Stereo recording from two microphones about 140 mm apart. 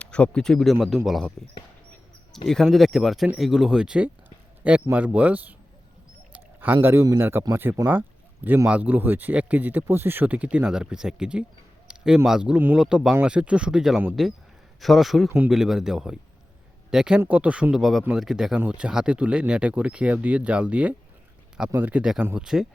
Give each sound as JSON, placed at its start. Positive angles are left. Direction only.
{"t": 0.0, "sound": "speech", "side_deg": 10}
{"t": 2.5, "sound": "speech", "side_deg": 0}
{"t": 6.3, "sound": "a sound", "side_deg": -15}
{"t": 6.8, "sound": "speech", "side_deg": -20}
{"t": 15.3, "sound": "speech", "side_deg": -15}
{"t": 15.5, "sound": "speech", "side_deg": -5}